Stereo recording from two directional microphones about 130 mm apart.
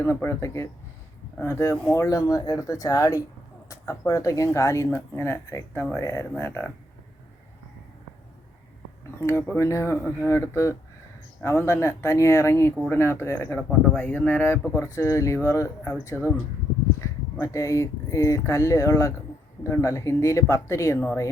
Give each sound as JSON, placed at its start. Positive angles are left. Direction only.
{"t": 0.0, "sound": "speech", "side_deg": 15}
{"t": 9.2, "sound": "speech", "side_deg": 20}
{"t": 17.0, "sound": "a sound", "side_deg": 20}
{"t": 17.4, "sound": "speech", "side_deg": 25}